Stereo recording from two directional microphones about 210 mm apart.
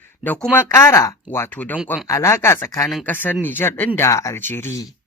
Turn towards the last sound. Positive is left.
turn(degrees=15)  # may be behind; listen again after turning